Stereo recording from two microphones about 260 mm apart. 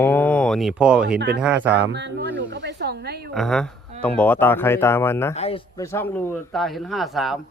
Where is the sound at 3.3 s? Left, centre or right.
Centre.